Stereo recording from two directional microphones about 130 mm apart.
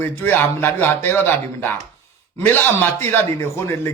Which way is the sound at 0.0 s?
15° left (ahead or behind).